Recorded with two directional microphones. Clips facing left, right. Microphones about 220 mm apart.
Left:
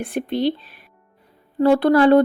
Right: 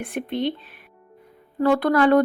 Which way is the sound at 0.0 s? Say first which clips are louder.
Left 4 dB; 35° left (ahead or behind).